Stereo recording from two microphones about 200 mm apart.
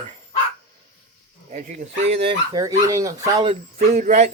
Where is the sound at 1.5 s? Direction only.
40° right (ahead or behind).